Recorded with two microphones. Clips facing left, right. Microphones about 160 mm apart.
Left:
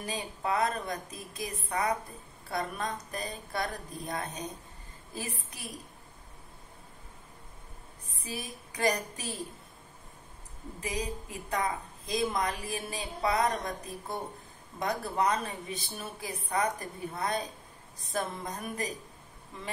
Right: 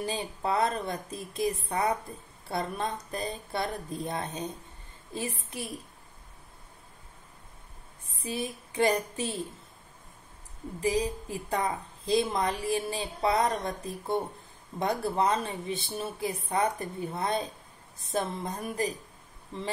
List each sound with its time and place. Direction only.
0.0 s a woman's voice: 30° right (ahead or behind)
8.2 s a woman's voice: 25° right (ahead or behind)
10.8 s a woman's voice: 30° right (ahead or behind)